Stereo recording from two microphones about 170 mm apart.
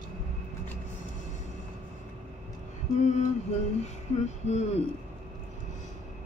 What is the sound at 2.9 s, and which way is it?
Music, 45° left (ahead or behind).